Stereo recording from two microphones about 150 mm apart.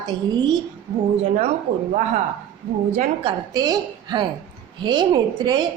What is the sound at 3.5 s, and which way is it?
A woman's voice, 25° right (ahead or behind).